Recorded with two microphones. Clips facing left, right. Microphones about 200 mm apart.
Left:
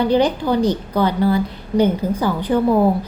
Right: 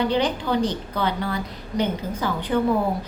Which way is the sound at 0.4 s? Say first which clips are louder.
Left 5 dB; 35° left (ahead or behind).